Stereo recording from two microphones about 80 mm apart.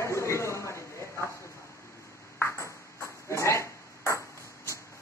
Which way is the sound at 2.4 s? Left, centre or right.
Left.